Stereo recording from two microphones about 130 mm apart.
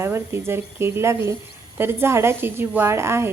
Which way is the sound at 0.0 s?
20° right (ahead or behind).